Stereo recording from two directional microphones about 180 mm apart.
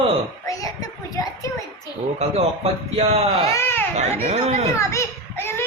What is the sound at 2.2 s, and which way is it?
Speech, 35° right (ahead or behind).